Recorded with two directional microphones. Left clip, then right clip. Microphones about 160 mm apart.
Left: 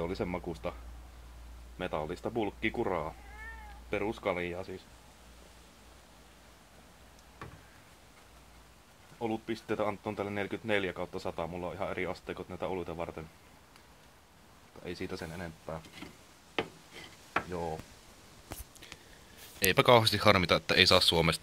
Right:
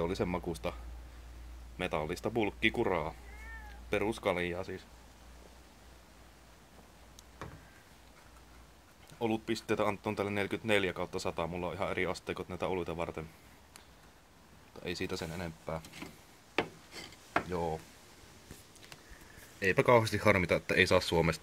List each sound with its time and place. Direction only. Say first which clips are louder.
0.0 s speech: right 1 dB; 20° right (ahead or behind)
1.8 s speech: right 1 dB; 20° right (ahead or behind)
9.2 s speech: right 1 dB; 25° right (ahead or behind)
14.8 s speech: right 2 dB; 25° right (ahead or behind)
17.5 s speech: right 2 dB; 25° right (ahead or behind)
19.7 s speech: left 3 dB; 20° left (ahead or behind)
20.1 s speech: left 3 dB; centre (ahead or behind)
21.0 s speech: left 4 dB; 20° left (ahead or behind)